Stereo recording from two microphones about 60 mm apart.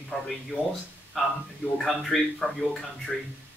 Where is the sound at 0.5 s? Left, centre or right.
Left.